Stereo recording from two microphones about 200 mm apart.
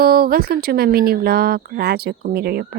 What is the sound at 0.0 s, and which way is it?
Speech, 50° right (ahead or behind).